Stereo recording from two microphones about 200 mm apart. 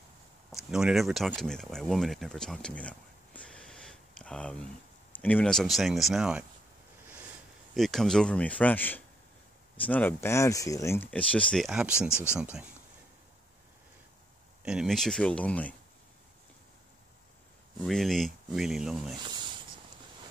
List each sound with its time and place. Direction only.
0.5 s speech: centre (ahead or behind)
7.7 s speech: centre (ahead or behind)
12.1 s speech: 10° left (ahead or behind)
14.6 s speech: 5° right (ahead or behind)
17.7 s speech: centre (ahead or behind)
19.2 s speech: 25° right (ahead or behind)